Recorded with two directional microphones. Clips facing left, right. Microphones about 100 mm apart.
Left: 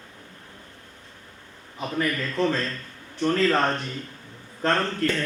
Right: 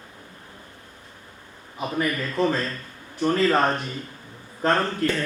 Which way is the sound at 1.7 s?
15° right (ahead or behind).